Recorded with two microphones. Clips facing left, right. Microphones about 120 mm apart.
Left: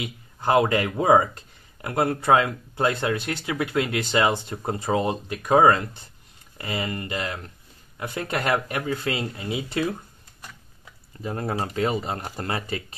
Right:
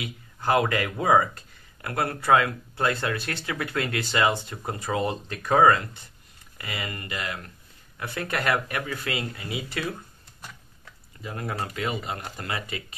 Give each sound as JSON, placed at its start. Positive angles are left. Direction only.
{"t": 0.0, "sound": "speech", "side_deg": 20}
{"t": 11.2, "sound": "speech", "side_deg": 35}